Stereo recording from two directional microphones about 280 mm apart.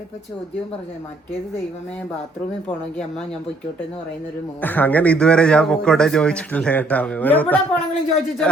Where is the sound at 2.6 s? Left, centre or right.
Centre.